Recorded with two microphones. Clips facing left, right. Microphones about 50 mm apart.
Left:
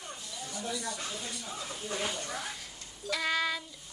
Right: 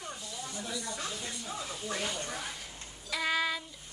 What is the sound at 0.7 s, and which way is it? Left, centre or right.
Speech, right.